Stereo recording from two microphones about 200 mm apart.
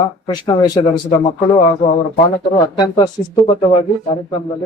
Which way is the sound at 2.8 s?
20° left (ahead or behind).